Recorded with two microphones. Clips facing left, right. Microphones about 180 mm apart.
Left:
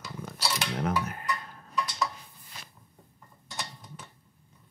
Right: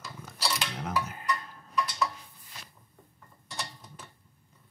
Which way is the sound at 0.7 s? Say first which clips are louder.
Left 3 dB; 60° left (ahead or behind).